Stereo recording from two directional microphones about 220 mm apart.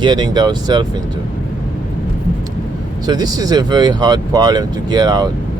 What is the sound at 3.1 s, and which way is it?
Speech, 20° right (ahead or behind).